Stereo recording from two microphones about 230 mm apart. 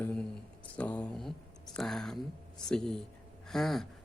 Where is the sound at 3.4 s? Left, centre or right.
Centre.